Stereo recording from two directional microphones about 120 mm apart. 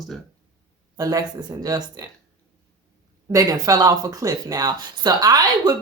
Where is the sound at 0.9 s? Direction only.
30° right (ahead or behind).